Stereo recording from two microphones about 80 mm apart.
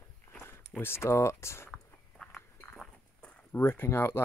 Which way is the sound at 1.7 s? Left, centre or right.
Centre.